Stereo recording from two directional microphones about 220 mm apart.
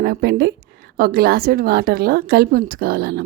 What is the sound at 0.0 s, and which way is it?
Speech, 45° right (ahead or behind).